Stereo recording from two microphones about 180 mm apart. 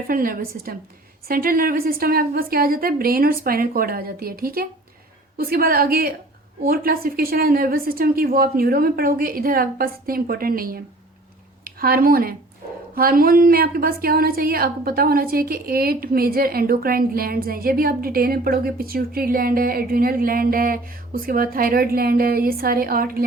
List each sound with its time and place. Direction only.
0.1 s a woman's voice: 50° right (ahead or behind)